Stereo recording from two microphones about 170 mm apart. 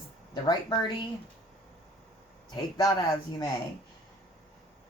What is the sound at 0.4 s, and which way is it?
Speech, 25° left (ahead or behind).